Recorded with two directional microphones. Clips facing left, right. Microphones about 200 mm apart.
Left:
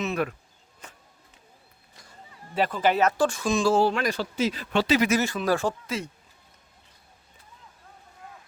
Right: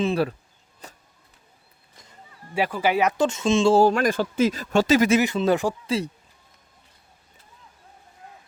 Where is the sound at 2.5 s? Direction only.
10° right (ahead or behind).